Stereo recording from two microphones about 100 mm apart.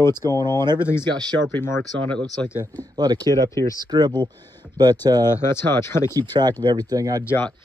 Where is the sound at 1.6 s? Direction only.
25° left (ahead or behind).